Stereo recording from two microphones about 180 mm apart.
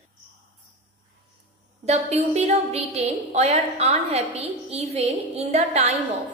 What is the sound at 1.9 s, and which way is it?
A woman's voice, 35° right (ahead or behind).